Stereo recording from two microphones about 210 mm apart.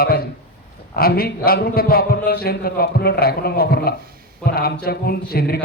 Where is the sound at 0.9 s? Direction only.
45° left (ahead or behind).